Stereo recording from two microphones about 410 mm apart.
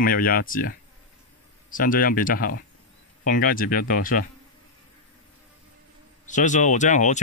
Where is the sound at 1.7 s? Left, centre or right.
Centre.